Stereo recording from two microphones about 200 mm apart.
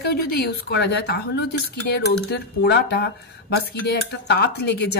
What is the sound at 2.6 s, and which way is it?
Speech, 55° left (ahead or behind).